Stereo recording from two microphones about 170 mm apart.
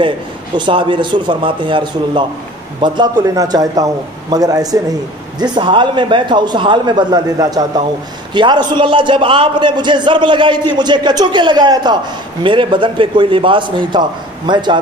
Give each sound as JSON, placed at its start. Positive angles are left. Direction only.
{"t": 0.6, "sound": "a man's voice", "side_deg": -30}